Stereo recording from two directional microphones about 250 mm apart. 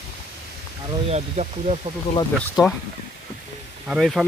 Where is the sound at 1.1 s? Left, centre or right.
Right.